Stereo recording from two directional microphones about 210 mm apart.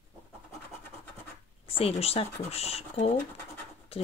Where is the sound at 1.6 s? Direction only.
30° left (ahead or behind).